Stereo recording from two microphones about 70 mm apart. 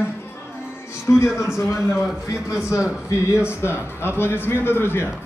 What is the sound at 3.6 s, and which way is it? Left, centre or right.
A man's voice, left.